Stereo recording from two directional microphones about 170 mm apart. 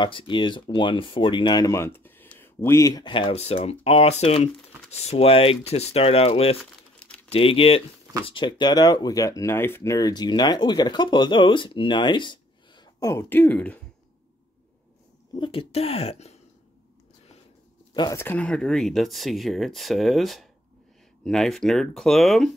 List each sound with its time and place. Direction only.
0.0 s speech: 30° left (ahead or behind); by 13.8 s 10° left (ahead or behind)
15.3 s speech: 30° left (ahead or behind)
17.9 s speech: 25° left (ahead or behind)
18.2 s speech: 10° left (ahead or behind)